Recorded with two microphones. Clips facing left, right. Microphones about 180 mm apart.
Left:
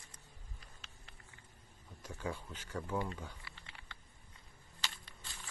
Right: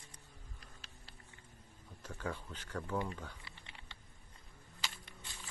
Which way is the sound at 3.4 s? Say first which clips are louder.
Even; 20° right (ahead or behind).